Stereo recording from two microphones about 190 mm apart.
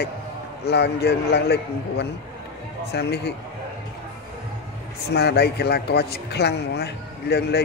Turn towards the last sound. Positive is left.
turn(degrees=60)  # may be behind; listen again after turning